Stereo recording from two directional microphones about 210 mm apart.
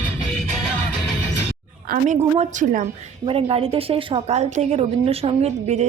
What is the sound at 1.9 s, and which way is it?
A woman's voice, 35° right (ahead or behind).